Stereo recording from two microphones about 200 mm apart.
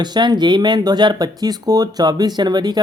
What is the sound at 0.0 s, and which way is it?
Speech, 20° right (ahead or behind).